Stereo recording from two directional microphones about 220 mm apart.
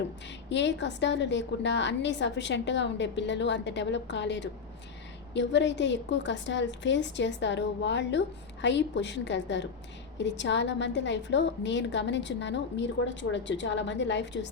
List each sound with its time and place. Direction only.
0.5 s a woman's voice: 55° left (ahead or behind)